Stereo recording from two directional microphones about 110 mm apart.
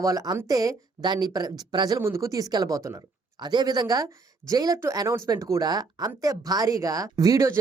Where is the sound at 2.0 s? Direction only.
25° right (ahead or behind).